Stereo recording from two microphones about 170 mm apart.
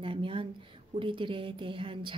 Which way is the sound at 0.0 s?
30° right (ahead or behind).